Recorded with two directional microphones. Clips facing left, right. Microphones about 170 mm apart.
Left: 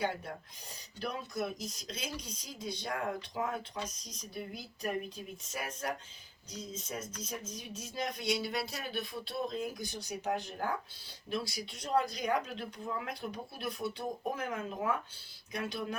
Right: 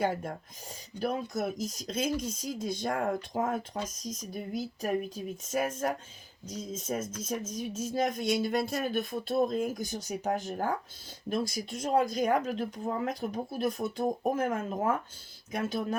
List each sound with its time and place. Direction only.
0.0 s speech: 45° right (ahead or behind)